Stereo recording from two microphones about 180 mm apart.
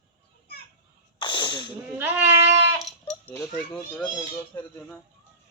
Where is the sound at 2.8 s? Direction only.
Centre (ahead or behind).